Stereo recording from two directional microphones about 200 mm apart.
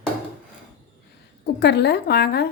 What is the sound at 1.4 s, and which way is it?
Speech, 55° left (ahead or behind).